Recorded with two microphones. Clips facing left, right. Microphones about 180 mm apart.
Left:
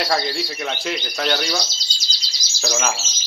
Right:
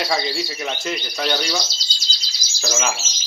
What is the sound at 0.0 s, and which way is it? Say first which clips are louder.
Speech: left 1 dB; centre (ahead or behind).